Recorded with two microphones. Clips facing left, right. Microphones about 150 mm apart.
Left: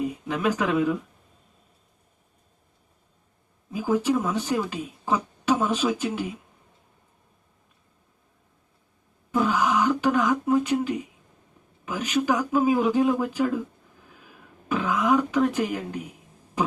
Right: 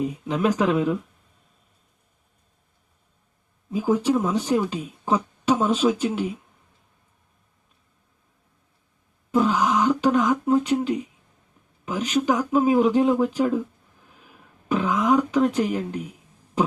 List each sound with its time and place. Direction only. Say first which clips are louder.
0.4 s speech: right 2 dB; 20° right (ahead or behind)
3.7 s speech: right 2 dB; 25° right (ahead or behind)
9.3 s a sound: right 2 dB; 20° right (ahead or behind)
10.5 s speech: right 2 dB; 25° right (ahead or behind)
14.7 s speech: right 2 dB; 20° right (ahead or behind)